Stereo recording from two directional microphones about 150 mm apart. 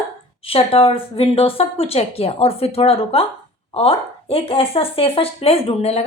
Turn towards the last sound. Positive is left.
turn(degrees=40)  # may be behind; listen again after turning